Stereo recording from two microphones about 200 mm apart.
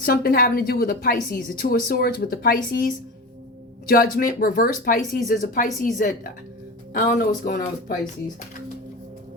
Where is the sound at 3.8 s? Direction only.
45° left (ahead or behind).